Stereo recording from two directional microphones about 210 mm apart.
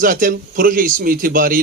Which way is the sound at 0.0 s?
40° right (ahead or behind).